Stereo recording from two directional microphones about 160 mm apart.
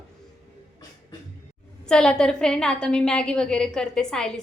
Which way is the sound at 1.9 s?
5° left (ahead or behind).